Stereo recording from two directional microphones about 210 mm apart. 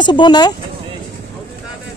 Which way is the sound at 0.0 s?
20° left (ahead or behind).